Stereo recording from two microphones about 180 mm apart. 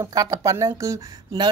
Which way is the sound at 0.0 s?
20° right (ahead or behind).